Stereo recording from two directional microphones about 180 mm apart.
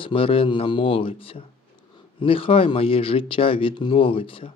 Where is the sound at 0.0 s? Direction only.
30° left (ahead or behind).